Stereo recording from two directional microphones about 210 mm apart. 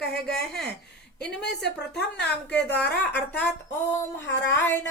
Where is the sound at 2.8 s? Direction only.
5° left (ahead or behind).